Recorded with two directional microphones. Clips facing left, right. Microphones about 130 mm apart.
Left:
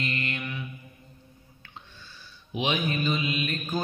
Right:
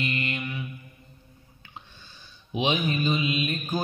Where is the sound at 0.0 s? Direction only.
15° right (ahead or behind).